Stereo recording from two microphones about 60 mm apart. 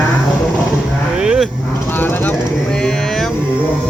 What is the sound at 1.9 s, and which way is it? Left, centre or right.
Vehicle, left.